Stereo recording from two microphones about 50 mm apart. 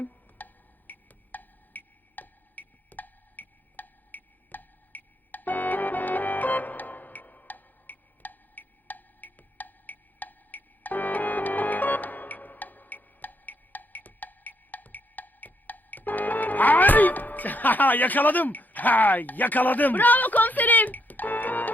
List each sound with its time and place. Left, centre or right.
0.0 s music: left